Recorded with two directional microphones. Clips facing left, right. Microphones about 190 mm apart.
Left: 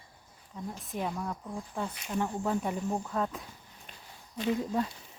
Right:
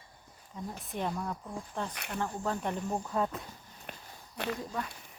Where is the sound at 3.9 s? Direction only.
60° right (ahead or behind).